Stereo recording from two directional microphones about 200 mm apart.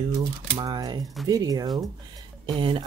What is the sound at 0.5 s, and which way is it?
Speech, 20° right (ahead or behind).